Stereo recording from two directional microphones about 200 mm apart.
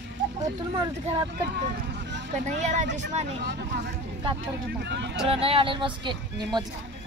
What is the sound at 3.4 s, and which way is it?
Speech, 55° right (ahead or behind).